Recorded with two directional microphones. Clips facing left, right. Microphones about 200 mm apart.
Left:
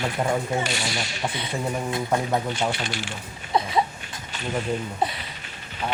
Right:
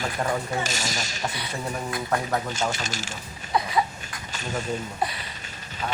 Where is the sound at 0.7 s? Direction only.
45° right (ahead or behind).